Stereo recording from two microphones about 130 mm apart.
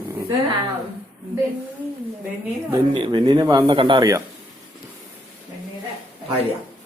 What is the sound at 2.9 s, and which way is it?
Speech, 40° right (ahead or behind).